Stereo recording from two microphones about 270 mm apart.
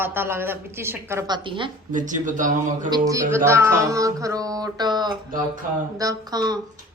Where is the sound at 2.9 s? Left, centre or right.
Centre.